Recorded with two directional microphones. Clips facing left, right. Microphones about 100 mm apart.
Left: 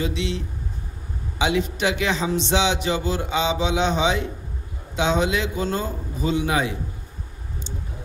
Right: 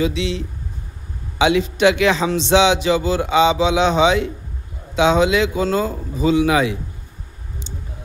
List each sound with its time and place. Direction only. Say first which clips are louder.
0.1 s a man's voice: right 4 dB; 90° right
1.4 s a man's voice: right 7 dB; 90° right